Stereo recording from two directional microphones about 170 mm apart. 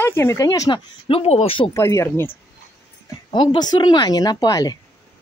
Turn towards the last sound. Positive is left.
turn(degrees=20)  # may be behind; listen again after turning